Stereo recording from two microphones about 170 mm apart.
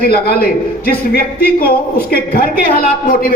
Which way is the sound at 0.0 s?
65° left (ahead or behind).